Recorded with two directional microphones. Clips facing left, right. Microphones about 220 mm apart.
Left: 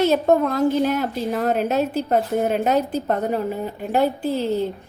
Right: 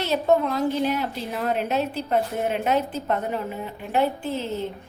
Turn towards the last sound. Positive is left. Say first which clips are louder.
# left 6 dB
turn(degrees=35)  # may be behind; listen again after turning